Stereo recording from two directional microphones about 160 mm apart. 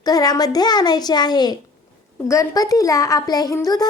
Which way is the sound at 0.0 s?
25° left (ahead or behind).